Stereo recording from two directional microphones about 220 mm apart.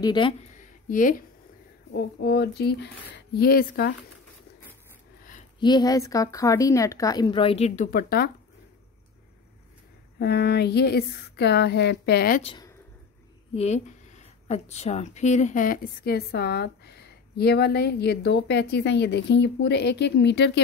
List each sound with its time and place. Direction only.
0.0 s speech: 20° left (ahead or behind)
0.6 s a sound: 35° left (ahead or behind)
1.9 s speech: 50° left (ahead or behind)
5.6 s speech: 20° left (ahead or behind); by 8.3 s 40° left (ahead or behind)
10.1 s speech: 45° left (ahead or behind)
12.4 s speech: 25° left (ahead or behind); by 20.6 s 50° left (ahead or behind)